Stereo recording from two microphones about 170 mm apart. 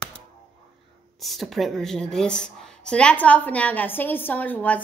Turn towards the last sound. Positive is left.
turn(degrees=10)  # may be behind; listen again after turning